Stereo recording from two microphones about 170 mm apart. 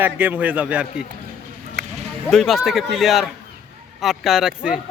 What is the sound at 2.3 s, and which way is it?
Speech, centre (ahead or behind).